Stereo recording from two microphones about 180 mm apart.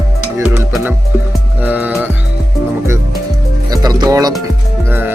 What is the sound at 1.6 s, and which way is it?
Music, 10° right (ahead or behind).